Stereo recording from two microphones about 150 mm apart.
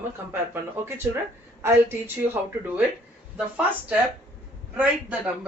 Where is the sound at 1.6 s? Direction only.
15° right (ahead or behind).